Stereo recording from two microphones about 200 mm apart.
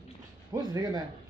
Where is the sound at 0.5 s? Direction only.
20° right (ahead or behind).